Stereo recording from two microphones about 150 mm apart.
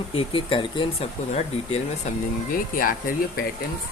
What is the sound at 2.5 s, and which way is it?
Speech, 70° left (ahead or behind).